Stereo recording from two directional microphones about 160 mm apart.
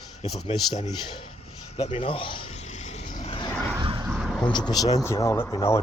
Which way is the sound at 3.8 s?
30° right (ahead or behind).